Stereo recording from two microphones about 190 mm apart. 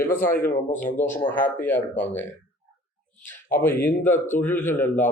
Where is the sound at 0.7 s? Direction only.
45° left (ahead or behind).